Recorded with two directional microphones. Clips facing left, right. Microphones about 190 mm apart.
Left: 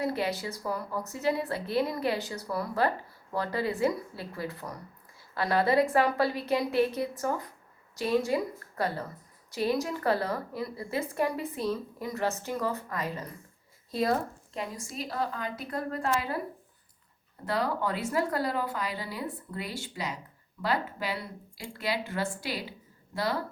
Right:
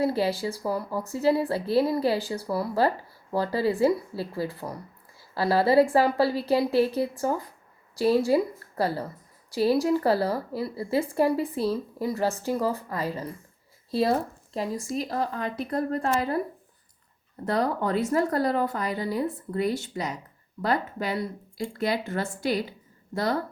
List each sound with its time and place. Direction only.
0.0 s a woman's voice: 30° right (ahead or behind)
17.4 s speech: 45° right (ahead or behind)